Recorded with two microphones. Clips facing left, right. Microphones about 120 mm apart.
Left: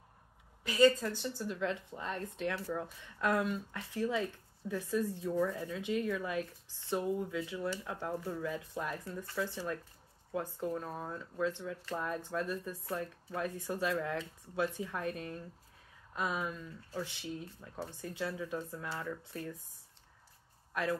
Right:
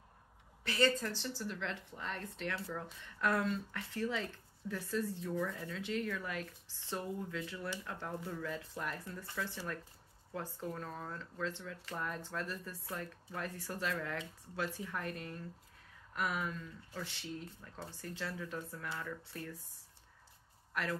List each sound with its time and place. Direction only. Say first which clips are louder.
0.7 s speech: left 6 dB; 10° left (ahead or behind)
20.7 s speech: left 4 dB; 20° left (ahead or behind)